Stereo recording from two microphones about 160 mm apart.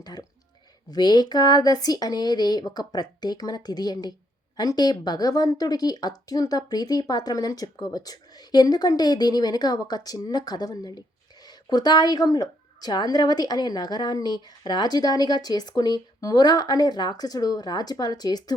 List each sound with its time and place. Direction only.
0.0 s a woman's voice: 25° left (ahead or behind)